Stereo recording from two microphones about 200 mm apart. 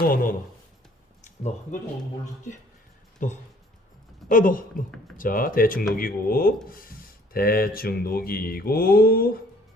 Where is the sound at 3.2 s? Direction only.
40° left (ahead or behind).